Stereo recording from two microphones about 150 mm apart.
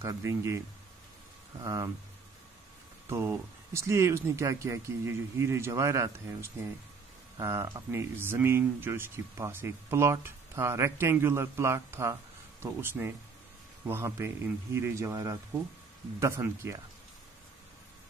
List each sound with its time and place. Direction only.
0.0 s speech: 20° right (ahead or behind)
3.1 s speech: 15° right (ahead or behind)